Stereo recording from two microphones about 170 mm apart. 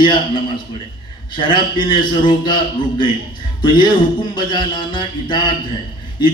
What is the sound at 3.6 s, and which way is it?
A man's voice, 30° left (ahead or behind).